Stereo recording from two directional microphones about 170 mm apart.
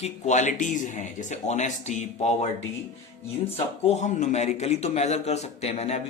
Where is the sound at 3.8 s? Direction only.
40° left (ahead or behind).